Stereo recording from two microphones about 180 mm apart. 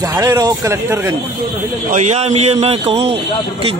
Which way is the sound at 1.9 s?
40° right (ahead or behind).